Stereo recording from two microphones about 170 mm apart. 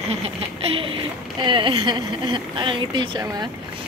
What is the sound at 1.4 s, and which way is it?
Speech, 30° right (ahead or behind).